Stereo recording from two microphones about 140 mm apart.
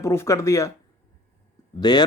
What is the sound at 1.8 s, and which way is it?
Speech, 30° left (ahead or behind).